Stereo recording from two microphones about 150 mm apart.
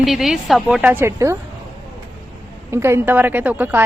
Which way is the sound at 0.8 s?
15° right (ahead or behind).